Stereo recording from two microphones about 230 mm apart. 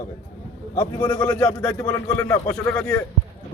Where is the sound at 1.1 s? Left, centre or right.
Centre.